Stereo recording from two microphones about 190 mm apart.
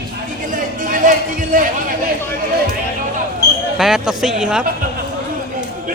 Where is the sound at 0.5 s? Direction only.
45° right (ahead or behind).